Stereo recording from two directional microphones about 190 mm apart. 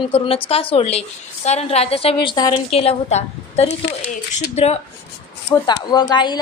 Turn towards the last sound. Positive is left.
turn(degrees=20)  # may be behind; listen again after turning